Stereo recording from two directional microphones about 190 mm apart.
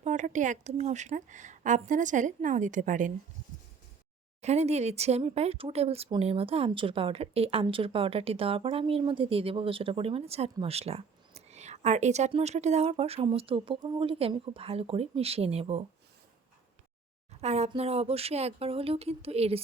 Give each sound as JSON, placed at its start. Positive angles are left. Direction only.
{"t": 0.0, "sound": "speech", "side_deg": -40}
{"t": 4.4, "sound": "speech", "side_deg": -35}
{"t": 17.4, "sound": "speech", "side_deg": -35}